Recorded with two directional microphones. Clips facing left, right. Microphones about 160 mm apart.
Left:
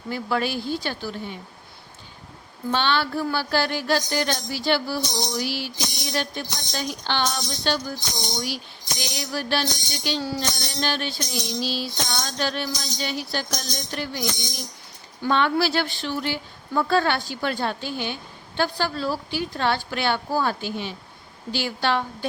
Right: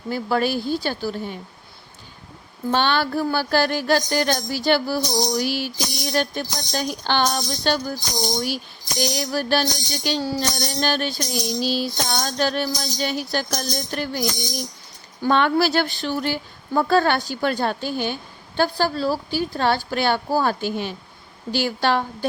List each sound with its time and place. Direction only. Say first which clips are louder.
0.1 s speech: right 4 dB; 40° right (ahead or behind)
2.7 s speech: right 3 dB; 45° right (ahead or behind)